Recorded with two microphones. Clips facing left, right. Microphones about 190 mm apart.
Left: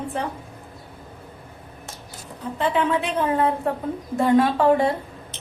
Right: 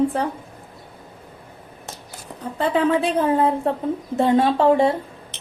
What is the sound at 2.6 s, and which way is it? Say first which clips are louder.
A woman's voice: right 3 dB; 35° right (ahead or behind).